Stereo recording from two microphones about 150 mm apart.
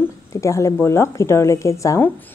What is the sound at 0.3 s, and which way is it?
A woman's voice, 20° left (ahead or behind).